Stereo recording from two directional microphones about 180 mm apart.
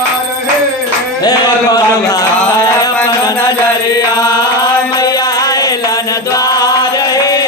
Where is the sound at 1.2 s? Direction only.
20° left (ahead or behind).